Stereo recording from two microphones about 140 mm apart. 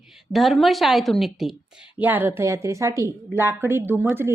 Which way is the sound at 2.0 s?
15° right (ahead or behind).